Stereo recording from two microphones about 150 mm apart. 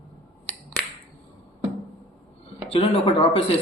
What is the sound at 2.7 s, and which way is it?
Speech, 40° left (ahead or behind).